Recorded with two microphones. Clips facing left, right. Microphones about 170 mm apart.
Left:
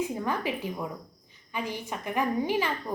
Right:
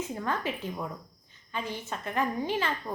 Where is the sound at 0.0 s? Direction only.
15° left (ahead or behind).